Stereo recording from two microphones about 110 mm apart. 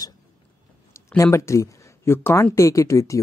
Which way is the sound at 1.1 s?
25° left (ahead or behind).